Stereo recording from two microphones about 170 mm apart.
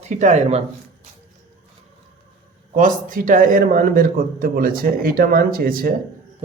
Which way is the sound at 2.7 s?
50° right (ahead or behind).